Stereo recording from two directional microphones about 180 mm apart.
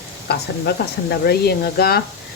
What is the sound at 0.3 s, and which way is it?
Speech, 65° left (ahead or behind).